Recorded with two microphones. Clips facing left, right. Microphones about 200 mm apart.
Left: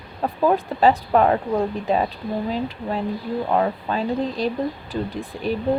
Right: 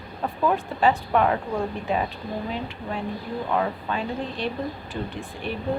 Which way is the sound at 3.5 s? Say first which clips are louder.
Left 3 dB; 35° left (ahead or behind).